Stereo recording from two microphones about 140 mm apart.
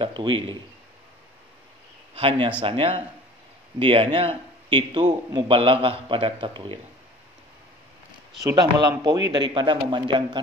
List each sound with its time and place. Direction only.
0.0 s a man's voice: 35° right (ahead or behind)
2.1 s a man's voice: 40° right (ahead or behind)
8.5 s a man's voice: 30° right (ahead or behind)